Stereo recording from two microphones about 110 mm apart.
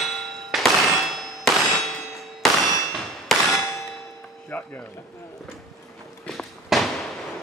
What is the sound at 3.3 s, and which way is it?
Clang, centre (ahead or behind).